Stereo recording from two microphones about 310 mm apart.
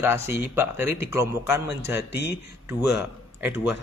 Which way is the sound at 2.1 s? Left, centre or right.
Left.